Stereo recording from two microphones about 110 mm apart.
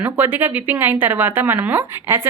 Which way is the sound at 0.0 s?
15° right (ahead or behind).